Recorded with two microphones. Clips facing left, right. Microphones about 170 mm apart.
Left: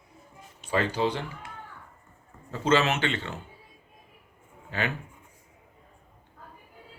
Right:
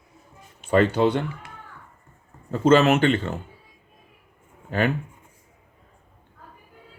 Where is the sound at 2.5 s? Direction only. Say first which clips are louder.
Right 7 dB; 50° right (ahead or behind).